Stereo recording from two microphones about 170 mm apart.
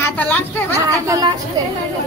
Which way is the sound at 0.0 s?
10° left (ahead or behind).